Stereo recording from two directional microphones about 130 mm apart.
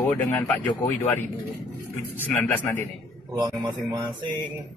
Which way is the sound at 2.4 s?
15° left (ahead or behind).